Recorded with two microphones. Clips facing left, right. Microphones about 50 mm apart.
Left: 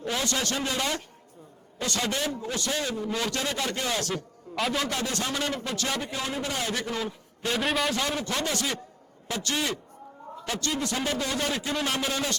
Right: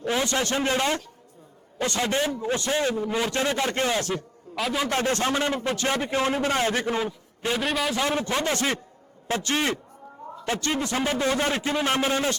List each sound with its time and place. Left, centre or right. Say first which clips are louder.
0.1 s a man's voice: right 4 dB; right
4.1 s a man's voice: right 2 dB; centre
4.9 s a man's voice: right 6 dB; right
7.5 s a man's voice: right 1 dB; centre
8.0 s a man's voice: right 4 dB; right